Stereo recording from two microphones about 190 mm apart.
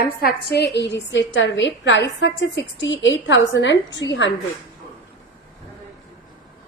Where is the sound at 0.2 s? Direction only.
55° left (ahead or behind); by 4.3 s 70° left (ahead or behind).